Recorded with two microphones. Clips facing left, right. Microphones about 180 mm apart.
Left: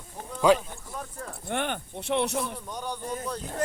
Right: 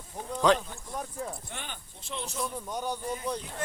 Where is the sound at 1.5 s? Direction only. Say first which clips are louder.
Left 13 dB; 60° left (ahead or behind).